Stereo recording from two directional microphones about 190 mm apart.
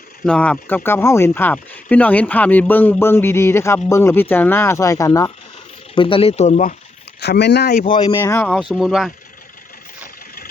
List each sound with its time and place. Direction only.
0.3 s speech: 5° left (ahead or behind)
5.9 s speech: 25° left (ahead or behind)
7.2 s speech: 60° left (ahead or behind)
7.9 s speech: 25° left (ahead or behind)
8.2 s speech: 10° left (ahead or behind)